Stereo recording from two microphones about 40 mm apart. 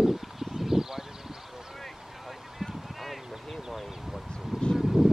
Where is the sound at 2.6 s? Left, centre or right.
Centre.